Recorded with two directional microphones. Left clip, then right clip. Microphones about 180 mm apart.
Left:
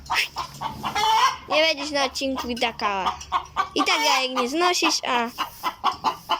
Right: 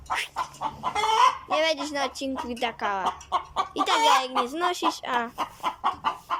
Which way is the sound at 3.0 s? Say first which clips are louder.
Left 2 dB; 25° right (ahead or behind).